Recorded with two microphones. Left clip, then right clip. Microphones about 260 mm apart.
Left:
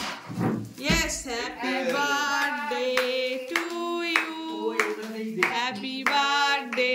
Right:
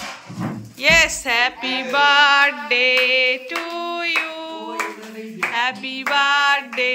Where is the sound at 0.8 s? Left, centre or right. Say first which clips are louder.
Right 13 dB; centre.